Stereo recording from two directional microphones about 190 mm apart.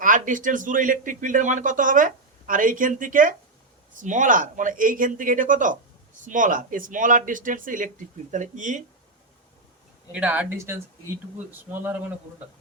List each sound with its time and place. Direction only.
0.0 s speech: 45° right (ahead or behind)
10.1 s speech: 5° right (ahead or behind)